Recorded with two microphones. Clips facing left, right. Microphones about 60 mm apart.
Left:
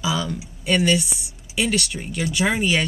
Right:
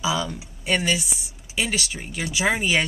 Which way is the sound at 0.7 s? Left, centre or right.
Centre.